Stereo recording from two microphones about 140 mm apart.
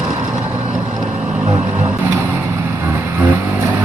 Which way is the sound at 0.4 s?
5° right (ahead or behind).